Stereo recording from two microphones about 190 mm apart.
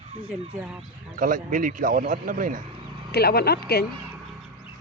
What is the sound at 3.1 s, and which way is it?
Speech, 55° left (ahead or behind).